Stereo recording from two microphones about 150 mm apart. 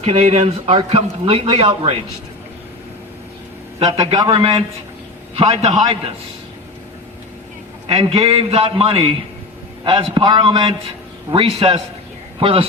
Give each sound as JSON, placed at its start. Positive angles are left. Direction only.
{"t": 0.0, "sound": "a man's voice", "side_deg": -45}
{"t": 3.8, "sound": "a man's voice", "side_deg": -25}
{"t": 4.3, "sound": "a man's voice", "side_deg": -40}
{"t": 7.9, "sound": "a man's voice", "side_deg": -45}